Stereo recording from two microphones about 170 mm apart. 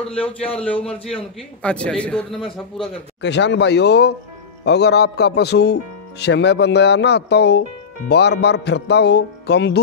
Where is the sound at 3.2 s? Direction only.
90° left.